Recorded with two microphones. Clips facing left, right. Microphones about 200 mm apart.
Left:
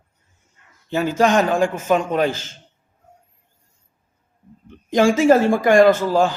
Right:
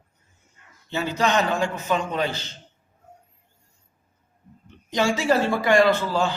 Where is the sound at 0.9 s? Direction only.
50° left (ahead or behind).